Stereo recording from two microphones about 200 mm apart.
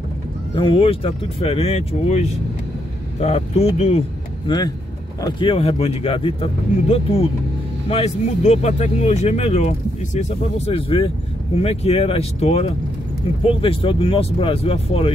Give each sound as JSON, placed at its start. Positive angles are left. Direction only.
{"t": 0.6, "sound": "speech", "side_deg": 25}
{"t": 4.5, "sound": "speech", "side_deg": 20}